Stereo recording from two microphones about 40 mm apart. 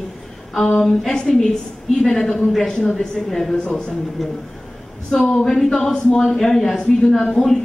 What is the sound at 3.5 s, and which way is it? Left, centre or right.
Speech, left.